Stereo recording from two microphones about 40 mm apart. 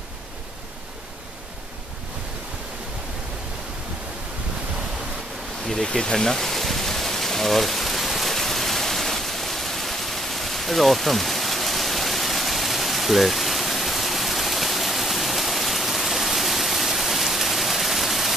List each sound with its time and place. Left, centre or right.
5.9 s speech: centre
6.1 s rain: centre